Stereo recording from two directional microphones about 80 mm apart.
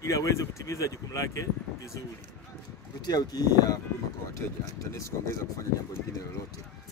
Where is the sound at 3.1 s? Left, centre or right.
Left.